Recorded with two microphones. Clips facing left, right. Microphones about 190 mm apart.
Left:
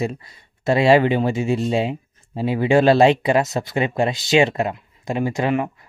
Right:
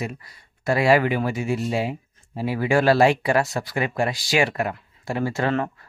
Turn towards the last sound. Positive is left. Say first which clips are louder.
# left 3 dB
turn(degrees=15)  # may be behind; listen again after turning